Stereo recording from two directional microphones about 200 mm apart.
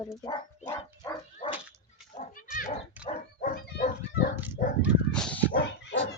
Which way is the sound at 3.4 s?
40° left (ahead or behind).